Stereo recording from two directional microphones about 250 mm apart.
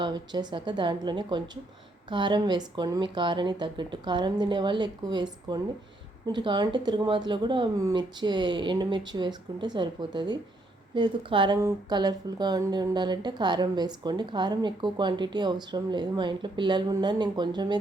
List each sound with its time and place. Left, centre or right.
0.0 s speech: centre